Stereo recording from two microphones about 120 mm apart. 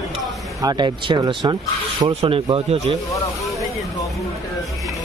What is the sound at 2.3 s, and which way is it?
Speech, 50° right (ahead or behind).